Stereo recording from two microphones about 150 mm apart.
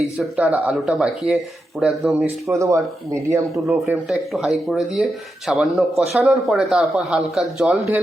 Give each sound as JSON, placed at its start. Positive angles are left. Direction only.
{"t": 0.0, "sound": "speech", "side_deg": -5}
{"t": 2.5, "sound": "speech", "side_deg": -20}
{"t": 3.5, "sound": "speech", "side_deg": 0}